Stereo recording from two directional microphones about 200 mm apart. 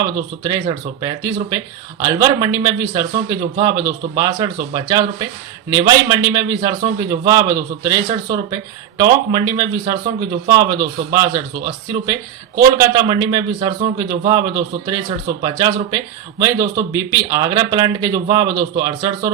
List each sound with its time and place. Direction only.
0.0 s a man's voice: 20° right (ahead or behind)